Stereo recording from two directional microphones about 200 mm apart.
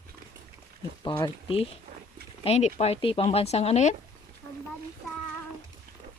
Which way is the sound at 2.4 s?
35° left (ahead or behind).